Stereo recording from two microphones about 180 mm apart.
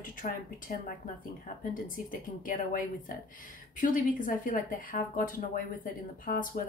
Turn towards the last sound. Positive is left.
turn(degrees=50)  # may be behind; listen again after turning